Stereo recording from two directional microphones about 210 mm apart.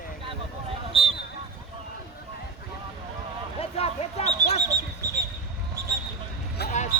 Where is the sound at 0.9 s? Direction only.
25° right (ahead or behind).